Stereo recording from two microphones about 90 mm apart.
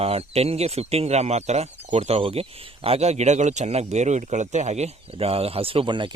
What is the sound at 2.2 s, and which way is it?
Speech, 90° right.